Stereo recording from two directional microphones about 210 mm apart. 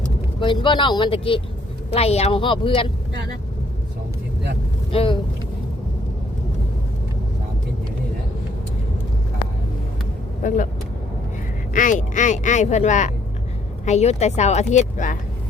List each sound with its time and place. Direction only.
0.3 s speech: 25° left (ahead or behind)
4.9 s speech: 25° left (ahead or behind)
10.4 s speech: 35° left (ahead or behind)
11.7 s speech: 40° left (ahead or behind)